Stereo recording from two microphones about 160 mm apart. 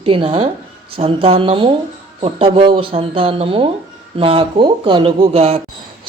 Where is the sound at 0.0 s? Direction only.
35° right (ahead or behind).